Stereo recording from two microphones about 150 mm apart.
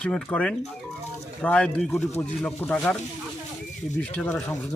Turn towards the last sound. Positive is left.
turn(degrees=15)  # may be behind; listen again after turning